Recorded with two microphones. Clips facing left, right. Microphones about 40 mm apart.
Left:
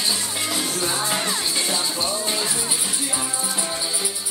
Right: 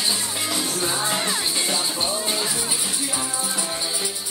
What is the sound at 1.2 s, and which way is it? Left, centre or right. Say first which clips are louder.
Music: even; centre.